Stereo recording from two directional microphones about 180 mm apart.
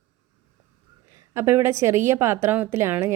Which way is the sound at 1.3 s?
15° right (ahead or behind).